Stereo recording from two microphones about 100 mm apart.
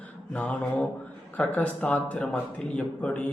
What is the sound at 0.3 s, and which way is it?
A man's voice, 15° left (ahead or behind).